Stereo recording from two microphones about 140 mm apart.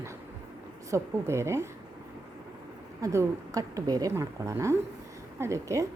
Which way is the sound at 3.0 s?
25° right (ahead or behind).